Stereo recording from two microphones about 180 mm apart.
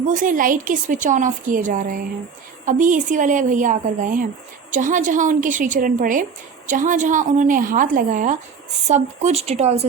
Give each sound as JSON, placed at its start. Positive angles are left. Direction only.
{"t": 0.0, "sound": "a woman's voice", "side_deg": -45}